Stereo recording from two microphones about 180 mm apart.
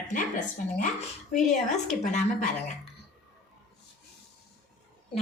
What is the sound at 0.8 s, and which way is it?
Speech, 40° left (ahead or behind).